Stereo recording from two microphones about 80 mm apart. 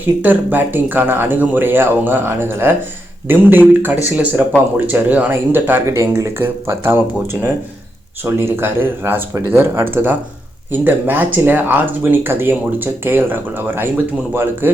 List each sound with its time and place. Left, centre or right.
0.0 s speech: right
5.9 s speech: right
8.2 s speech: right